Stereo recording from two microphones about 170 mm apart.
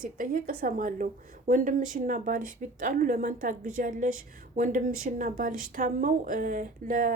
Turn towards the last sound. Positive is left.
turn(degrees=-55)  # may be behind; listen again after turning